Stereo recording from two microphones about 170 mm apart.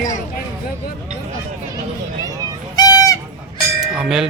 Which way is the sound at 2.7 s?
20° left (ahead or behind).